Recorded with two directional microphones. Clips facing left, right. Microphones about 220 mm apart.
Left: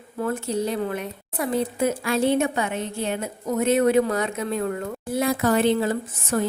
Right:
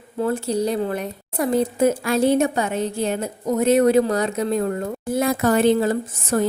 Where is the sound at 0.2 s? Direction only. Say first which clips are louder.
Right 4 dB; 35° right (ahead or behind).